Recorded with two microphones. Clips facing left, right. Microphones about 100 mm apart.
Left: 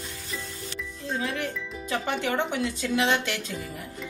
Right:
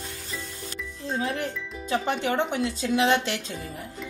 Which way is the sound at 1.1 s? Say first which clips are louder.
Right 2 dB; 35° right (ahead or behind).